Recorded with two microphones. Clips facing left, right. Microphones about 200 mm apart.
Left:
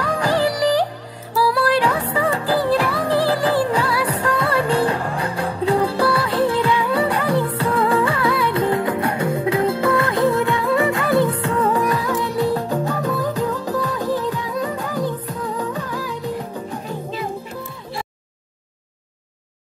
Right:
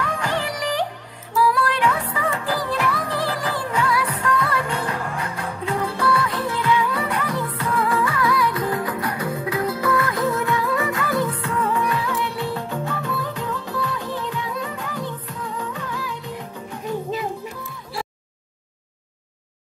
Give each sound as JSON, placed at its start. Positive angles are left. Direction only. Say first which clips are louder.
{"t": 0.0, "sound": "music", "louder": "left 6 dB", "side_deg": 35}